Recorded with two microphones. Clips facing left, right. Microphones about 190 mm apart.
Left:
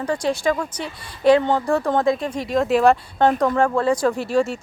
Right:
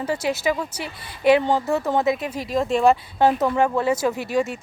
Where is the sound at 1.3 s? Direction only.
15° right (ahead or behind).